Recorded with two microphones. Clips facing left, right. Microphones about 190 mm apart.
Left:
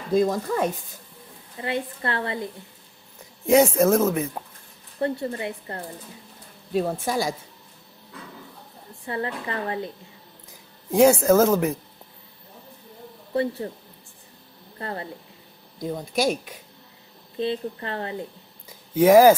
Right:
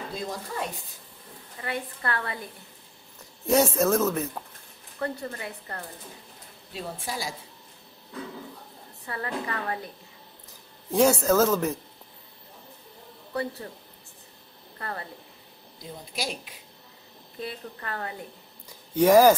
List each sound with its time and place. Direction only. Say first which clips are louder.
0.1 s a woman's voice: left 17 dB; 45° left (ahead or behind)
1.6 s a woman's voice: left 5 dB; 25° left (ahead or behind)
3.4 s speech: left 5 dB; 10° left (ahead or behind)
4.9 s a woman's voice: left 6 dB; 25° left (ahead or behind)
6.7 s a woman's voice: left 11 dB; 50° left (ahead or behind)
9.0 s a woman's voice: left 3 dB; 25° left (ahead or behind)
10.9 s speech: left 5 dB; 10° left (ahead or behind)
13.3 s a woman's voice: left 7 dB; 25° left (ahead or behind)
14.8 s speech: left 4 dB; 25° left (ahead or behind)
15.8 s a woman's voice: left 11 dB; 45° left (ahead or behind)
17.4 s a woman's voice: left 10 dB; 25° left (ahead or behind)
18.9 s speech: left 3 dB; 10° left (ahead or behind)